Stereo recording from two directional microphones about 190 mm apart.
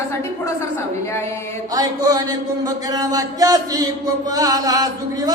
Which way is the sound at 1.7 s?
20° right (ahead or behind).